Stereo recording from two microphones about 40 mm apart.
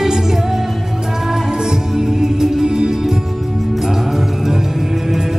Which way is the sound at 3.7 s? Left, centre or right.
Centre.